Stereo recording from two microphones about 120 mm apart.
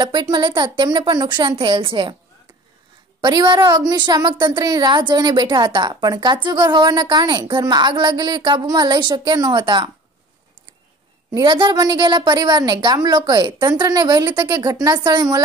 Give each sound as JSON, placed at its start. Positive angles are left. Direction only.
{"t": 0.0, "sound": "a woman's voice", "side_deg": -40}
{"t": 3.2, "sound": "a woman's voice", "side_deg": -40}
{"t": 11.3, "sound": "a woman's voice", "side_deg": -40}